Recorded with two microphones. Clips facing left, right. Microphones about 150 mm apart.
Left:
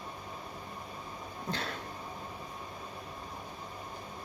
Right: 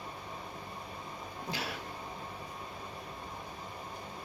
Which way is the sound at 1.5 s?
10° right (ahead or behind).